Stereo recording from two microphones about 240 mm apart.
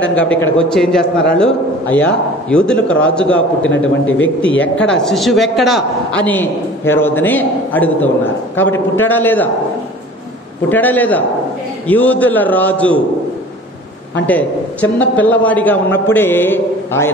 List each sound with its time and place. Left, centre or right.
0.1 s a man's voice: centre
3.6 s a man's voice: left
4.6 s a man's voice: centre
10.7 s a man's voice: centre
14.2 s a man's voice: centre